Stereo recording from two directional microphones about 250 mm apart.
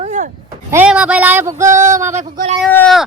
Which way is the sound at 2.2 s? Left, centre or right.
Right.